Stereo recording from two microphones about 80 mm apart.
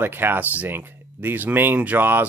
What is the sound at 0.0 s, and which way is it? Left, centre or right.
Speech, right.